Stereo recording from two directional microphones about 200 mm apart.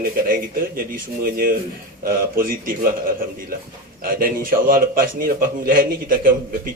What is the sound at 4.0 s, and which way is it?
Speech, 45° right (ahead or behind).